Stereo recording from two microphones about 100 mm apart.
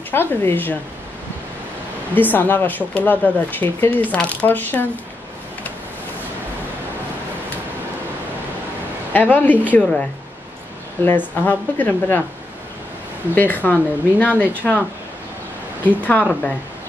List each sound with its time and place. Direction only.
0.1 s a woman's voice: 25° left (ahead or behind)
2.1 s speech: 20° left (ahead or behind)
9.1 s a woman's voice: 20° left (ahead or behind)
11.1 s a woman's voice: 20° left (ahead or behind)
13.3 s speech: 20° left (ahead or behind)
16.0 s speech: 15° left (ahead or behind)